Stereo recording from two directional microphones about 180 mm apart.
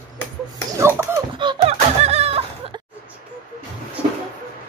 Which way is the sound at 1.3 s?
30° right (ahead or behind).